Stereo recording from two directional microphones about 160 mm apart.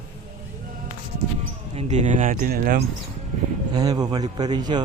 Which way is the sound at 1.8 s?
45° right (ahead or behind).